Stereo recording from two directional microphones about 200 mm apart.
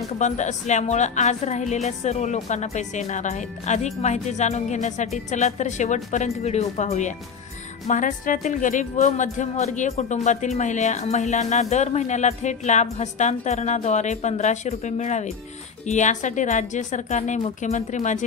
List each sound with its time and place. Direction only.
0.2 s a woman's voice: 35° left (ahead or behind)